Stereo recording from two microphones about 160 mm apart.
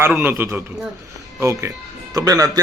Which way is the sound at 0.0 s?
15° right (ahead or behind).